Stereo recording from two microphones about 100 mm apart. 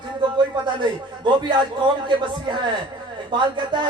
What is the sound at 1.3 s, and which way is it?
A man's voice, 50° right (ahead or behind).